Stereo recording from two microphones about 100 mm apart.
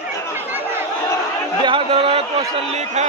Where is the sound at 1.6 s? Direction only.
60° right (ahead or behind); by 2.8 s 80° right.